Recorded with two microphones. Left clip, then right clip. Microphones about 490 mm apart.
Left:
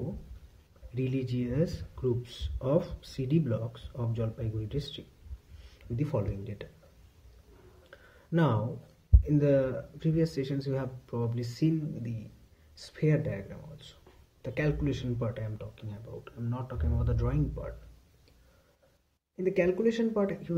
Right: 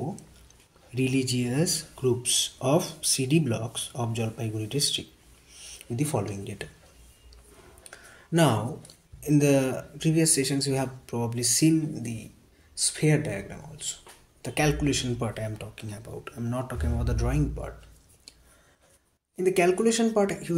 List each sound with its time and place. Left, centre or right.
0.9 s speech: left
8.3 s speech: left
19.3 s speech: left